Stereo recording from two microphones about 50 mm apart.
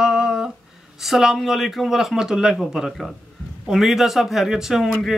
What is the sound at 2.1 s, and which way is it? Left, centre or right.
A man's voice, centre.